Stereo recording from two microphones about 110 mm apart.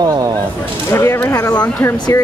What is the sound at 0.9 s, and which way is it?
Speech, 25° left (ahead or behind).